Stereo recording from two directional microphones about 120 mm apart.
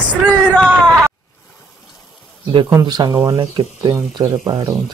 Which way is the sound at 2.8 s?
35° right (ahead or behind).